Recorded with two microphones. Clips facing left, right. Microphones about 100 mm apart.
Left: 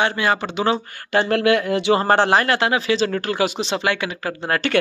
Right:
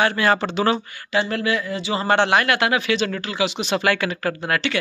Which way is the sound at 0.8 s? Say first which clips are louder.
Left 3 dB; 50° left (ahead or behind).